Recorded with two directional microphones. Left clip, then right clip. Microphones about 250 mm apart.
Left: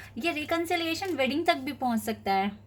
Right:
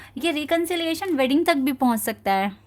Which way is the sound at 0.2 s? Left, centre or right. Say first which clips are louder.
Right 6 dB; right.